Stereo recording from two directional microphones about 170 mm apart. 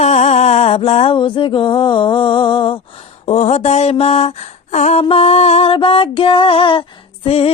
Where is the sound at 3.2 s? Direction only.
40° left (ahead or behind).